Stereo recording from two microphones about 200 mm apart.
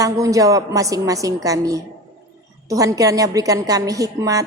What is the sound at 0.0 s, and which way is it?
A woman's voice, 15° right (ahead or behind).